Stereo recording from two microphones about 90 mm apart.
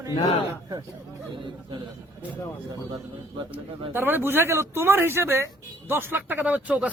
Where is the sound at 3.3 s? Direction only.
75° right (ahead or behind).